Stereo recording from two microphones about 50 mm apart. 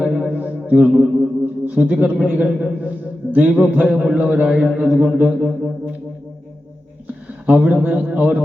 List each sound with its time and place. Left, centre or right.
0.0 s music: centre
0.3 s music: right
0.7 s a man's voice: right
5.4 s music: centre
7.4 s a man's voice: right